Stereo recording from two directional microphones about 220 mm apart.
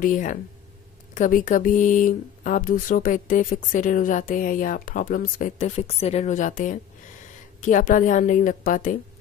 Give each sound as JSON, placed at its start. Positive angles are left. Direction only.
{"t": 0.0, "sound": "speech", "side_deg": 35}